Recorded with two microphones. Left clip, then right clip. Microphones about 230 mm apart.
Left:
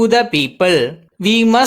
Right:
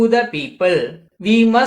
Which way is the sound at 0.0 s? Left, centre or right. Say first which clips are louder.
Left 3 dB; left.